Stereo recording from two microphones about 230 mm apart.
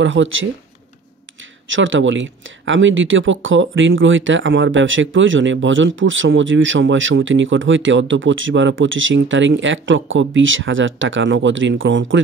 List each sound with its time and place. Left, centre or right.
0.0 s speech: right
1.7 s speech: right